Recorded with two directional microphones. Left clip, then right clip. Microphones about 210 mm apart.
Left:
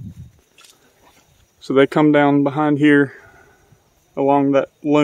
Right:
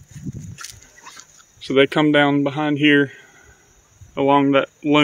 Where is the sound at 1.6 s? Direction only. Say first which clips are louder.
Left 2 dB; 25° left (ahead or behind).